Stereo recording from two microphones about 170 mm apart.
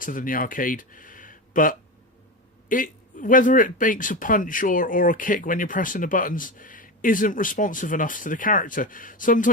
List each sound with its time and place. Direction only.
0.0 s speech: 50° left (ahead or behind)